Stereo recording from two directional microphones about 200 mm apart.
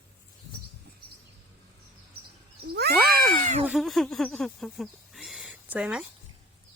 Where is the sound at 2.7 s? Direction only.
55° right (ahead or behind).